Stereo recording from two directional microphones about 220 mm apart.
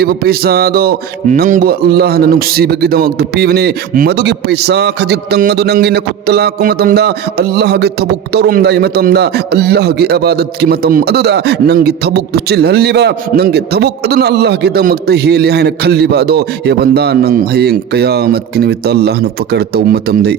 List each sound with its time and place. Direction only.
0.0 s speech: 45° right (ahead or behind)